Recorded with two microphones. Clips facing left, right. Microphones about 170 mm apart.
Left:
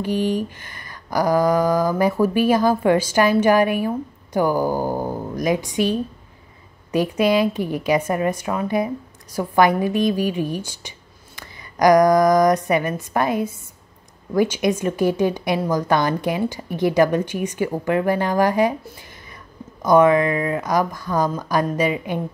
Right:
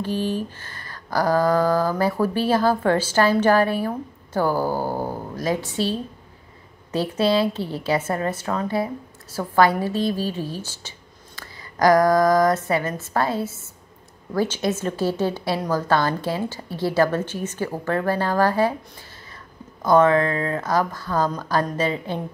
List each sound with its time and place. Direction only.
0.0 s a woman's voice: 15° left (ahead or behind)
19.8 s a woman's voice: 15° left (ahead or behind)